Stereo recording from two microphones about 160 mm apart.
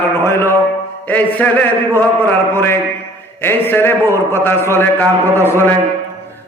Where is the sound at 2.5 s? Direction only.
15° left (ahead or behind).